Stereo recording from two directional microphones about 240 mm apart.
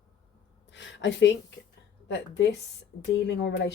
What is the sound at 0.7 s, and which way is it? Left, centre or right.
Speech, left.